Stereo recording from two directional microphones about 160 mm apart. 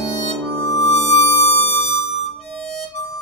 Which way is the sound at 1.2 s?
15° left (ahead or behind).